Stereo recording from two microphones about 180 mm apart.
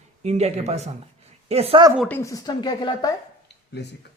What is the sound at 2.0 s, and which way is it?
Speech, 15° left (ahead or behind).